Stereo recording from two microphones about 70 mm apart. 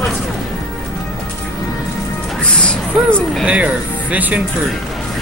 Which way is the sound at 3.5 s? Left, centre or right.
Centre.